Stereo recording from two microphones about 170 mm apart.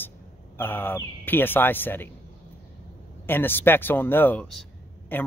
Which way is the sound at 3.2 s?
10° left (ahead or behind).